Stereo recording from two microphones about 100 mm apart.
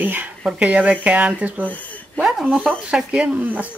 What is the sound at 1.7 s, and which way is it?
Speech, 15° left (ahead or behind).